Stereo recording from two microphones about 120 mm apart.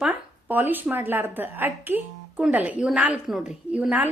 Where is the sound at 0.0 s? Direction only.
15° right (ahead or behind).